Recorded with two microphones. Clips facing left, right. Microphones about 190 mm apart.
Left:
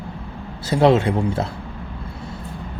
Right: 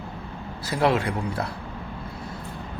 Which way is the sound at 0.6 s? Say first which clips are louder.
Left 7 dB; 25° left (ahead or behind).